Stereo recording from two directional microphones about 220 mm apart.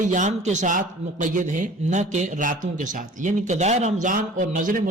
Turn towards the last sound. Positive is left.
turn(degrees=-35)  # may be behind; listen again after turning